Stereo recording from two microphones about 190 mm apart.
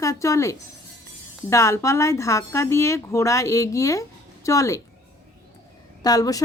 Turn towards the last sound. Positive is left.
turn(degrees=20)  # may be behind; listen again after turning